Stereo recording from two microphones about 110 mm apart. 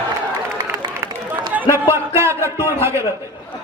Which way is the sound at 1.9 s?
25° right (ahead or behind).